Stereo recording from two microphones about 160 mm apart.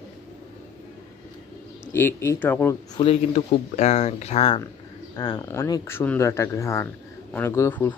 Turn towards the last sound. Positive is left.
turn(degrees=15)  # may be behind; listen again after turning